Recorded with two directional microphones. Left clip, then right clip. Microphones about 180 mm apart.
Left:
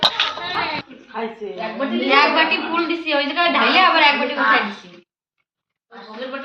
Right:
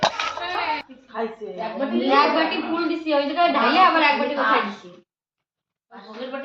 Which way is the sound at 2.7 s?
30° right (ahead or behind).